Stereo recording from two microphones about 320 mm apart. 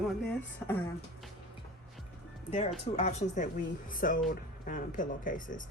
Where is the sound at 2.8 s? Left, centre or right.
Left.